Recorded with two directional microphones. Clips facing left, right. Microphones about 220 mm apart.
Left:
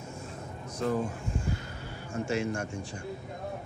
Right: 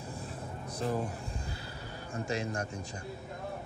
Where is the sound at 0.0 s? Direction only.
35° right (ahead or behind).